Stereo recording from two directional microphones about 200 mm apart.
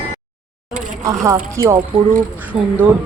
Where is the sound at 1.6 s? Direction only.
15° right (ahead or behind).